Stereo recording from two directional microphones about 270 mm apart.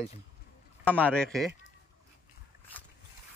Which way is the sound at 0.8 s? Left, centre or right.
Centre.